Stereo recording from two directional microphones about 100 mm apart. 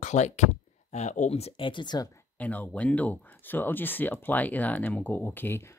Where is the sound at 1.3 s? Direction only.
90° left.